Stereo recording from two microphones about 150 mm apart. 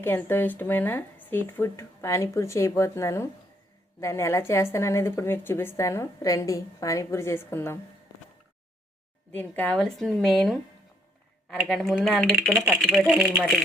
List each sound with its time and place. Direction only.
0.0 s a woman's voice: 15° left (ahead or behind)
9.3 s a woman's voice: 10° left (ahead or behind)